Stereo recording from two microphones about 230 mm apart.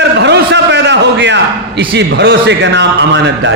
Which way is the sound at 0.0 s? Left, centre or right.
Right.